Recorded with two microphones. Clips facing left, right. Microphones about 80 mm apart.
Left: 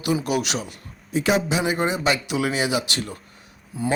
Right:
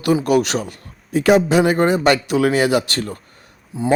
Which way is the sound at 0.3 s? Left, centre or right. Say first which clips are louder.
Right 8 dB; right.